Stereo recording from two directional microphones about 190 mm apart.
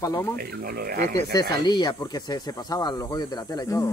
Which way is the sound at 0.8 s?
55° right (ahead or behind).